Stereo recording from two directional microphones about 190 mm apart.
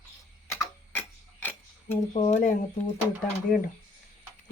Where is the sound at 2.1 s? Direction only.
40° left (ahead or behind).